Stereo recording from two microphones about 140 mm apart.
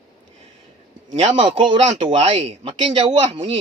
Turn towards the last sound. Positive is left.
turn(degrees=-40)  # may be behind; listen again after turning